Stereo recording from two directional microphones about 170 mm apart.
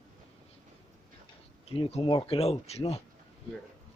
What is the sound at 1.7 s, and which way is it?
Speech, 35° left (ahead or behind).